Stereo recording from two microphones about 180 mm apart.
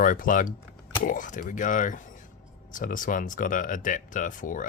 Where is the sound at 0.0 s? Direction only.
50° left (ahead or behind).